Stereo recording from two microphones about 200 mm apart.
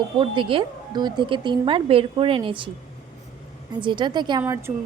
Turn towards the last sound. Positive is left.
turn(degrees=-15)  # may be behind; listen again after turning